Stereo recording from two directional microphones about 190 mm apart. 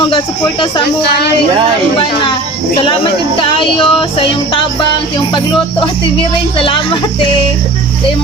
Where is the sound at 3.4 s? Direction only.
25° left (ahead or behind).